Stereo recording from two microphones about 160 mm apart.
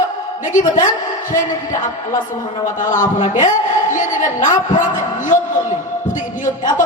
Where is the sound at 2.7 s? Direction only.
55° left (ahead or behind).